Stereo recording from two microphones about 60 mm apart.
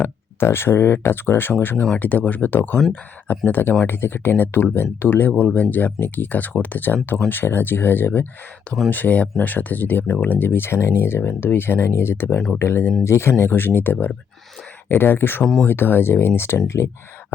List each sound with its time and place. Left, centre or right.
0.0 s speech: left